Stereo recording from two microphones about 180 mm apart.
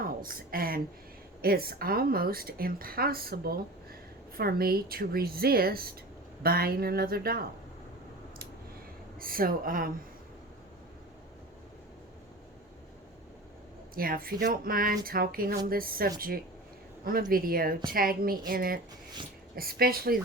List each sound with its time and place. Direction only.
0.0 s a woman's voice: 55° right (ahead or behind)
9.2 s speech: 55° right (ahead or behind)
13.9 s a woman's voice: 55° right (ahead or behind)